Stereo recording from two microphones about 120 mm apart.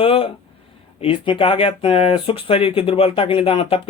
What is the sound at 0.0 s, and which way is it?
Speech, 55° left (ahead or behind).